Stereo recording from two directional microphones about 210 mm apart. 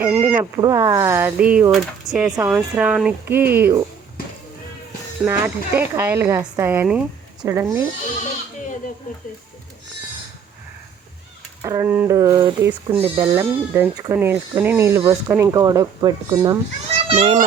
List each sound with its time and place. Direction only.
0.0 s speech: 10° right (ahead or behind)
5.2 s speech: 10° right (ahead or behind)
11.6 s a child's voice: 15° right (ahead or behind)